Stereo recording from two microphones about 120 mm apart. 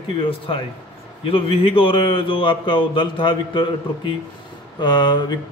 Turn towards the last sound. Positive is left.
turn(degrees=40)  # may be behind; listen again after turning